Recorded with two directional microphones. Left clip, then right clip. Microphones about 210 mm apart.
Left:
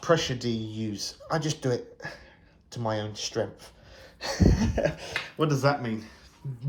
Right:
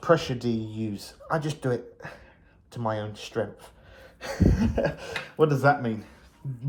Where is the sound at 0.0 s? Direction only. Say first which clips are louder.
Right 2 dB; centre (ahead or behind).